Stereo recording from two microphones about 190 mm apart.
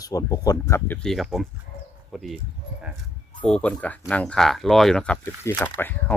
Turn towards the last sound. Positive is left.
turn(degrees=10)  # may be behind; listen again after turning